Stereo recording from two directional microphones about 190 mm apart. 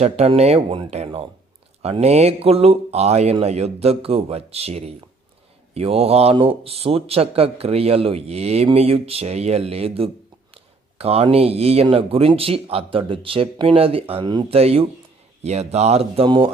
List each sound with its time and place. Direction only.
0.0 s speech: 35° right (ahead or behind)